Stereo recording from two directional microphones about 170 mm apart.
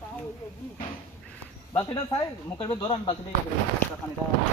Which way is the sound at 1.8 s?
25° left (ahead or behind).